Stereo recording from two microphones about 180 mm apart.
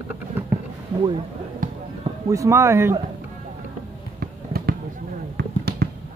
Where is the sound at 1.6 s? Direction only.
50° right (ahead or behind).